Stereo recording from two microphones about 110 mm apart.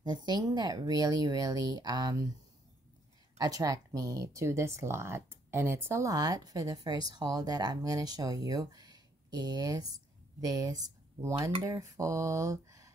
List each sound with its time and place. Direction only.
0.0 s speech: 40° right (ahead or behind)
3.3 s speech: 35° right (ahead or behind)